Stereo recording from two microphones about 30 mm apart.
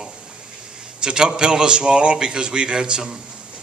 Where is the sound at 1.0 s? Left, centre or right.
Right.